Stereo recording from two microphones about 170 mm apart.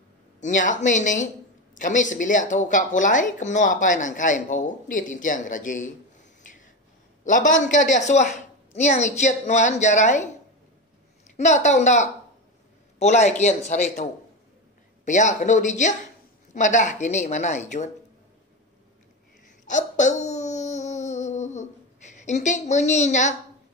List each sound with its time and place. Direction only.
0.4 s speech: 50° left (ahead or behind)
7.2 s speech: 50° left (ahead or behind)
11.3 s speech: 45° left (ahead or behind)
15.0 s speech: 45° left (ahead or behind)
19.6 s a sound: 45° left (ahead or behind)